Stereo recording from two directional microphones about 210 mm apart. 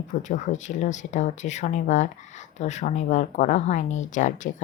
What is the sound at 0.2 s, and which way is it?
Speech, 35° left (ahead or behind).